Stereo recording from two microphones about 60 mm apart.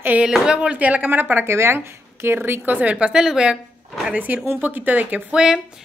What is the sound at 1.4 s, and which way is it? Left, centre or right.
Speech, right.